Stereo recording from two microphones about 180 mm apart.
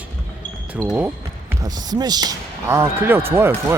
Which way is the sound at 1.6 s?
20° right (ahead or behind).